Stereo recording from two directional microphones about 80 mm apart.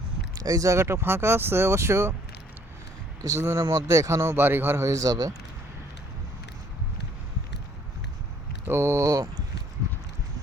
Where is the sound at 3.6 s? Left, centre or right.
Right.